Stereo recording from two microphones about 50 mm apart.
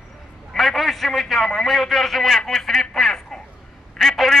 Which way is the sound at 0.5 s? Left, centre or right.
Centre.